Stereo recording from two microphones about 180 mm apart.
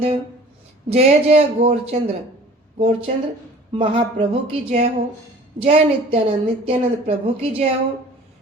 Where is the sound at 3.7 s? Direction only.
30° right (ahead or behind).